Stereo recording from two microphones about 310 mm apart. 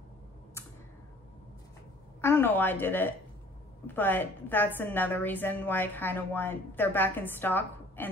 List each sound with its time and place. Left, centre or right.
2.2 s a woman's voice: centre